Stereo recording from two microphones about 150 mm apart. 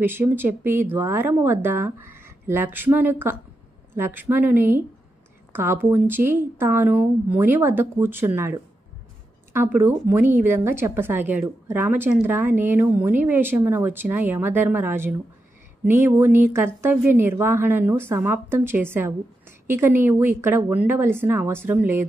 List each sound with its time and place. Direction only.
0.0 s a woman's voice: 15° right (ahead or behind)
9.5 s a woman's voice: 15° right (ahead or behind)